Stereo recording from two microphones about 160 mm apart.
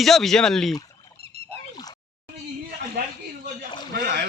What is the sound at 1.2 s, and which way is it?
Splash, 35° right (ahead or behind).